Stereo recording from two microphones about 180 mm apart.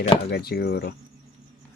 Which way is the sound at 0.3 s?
60° left (ahead or behind).